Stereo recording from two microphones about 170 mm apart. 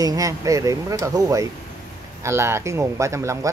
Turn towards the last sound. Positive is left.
turn(degrees=-15)  # may be behind; listen again after turning